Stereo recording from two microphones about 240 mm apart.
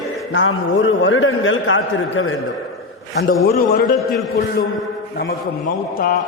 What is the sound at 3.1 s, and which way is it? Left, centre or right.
Speech, left.